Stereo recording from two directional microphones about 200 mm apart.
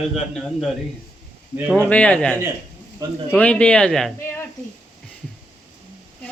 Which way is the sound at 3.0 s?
15° right (ahead or behind).